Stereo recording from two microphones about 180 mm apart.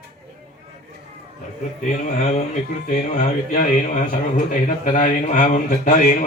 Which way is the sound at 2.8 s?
45° left (ahead or behind).